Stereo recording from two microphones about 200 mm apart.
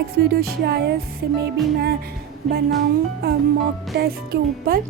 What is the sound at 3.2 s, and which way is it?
Speech, 50° right (ahead or behind).